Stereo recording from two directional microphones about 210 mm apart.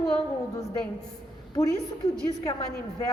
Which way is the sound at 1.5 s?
15° left (ahead or behind).